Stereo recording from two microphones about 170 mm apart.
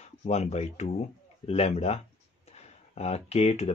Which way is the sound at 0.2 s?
40° left (ahead or behind).